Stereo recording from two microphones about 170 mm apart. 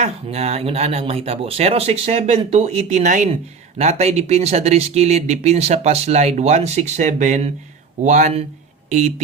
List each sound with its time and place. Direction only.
0.0 s speech: 40° right (ahead or behind)